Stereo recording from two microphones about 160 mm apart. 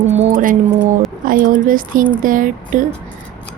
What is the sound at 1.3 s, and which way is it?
Speech, 60° right (ahead or behind).